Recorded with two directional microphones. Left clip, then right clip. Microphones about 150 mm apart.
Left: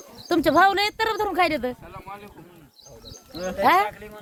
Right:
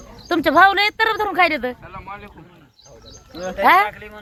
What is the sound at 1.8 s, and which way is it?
Speech, 15° left (ahead or behind).